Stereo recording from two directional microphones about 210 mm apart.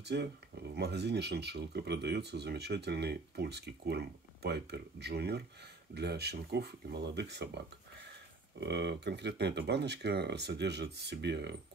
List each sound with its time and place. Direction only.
0.0 s speech: 55° right (ahead or behind)